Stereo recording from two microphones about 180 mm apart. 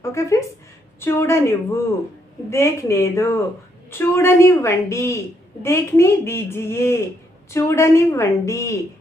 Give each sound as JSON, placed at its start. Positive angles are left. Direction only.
{"t": 0.0, "sound": "speech", "side_deg": 15}